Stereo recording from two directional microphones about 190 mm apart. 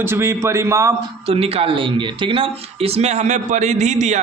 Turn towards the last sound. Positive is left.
turn(degrees=-40)  # may be behind; listen again after turning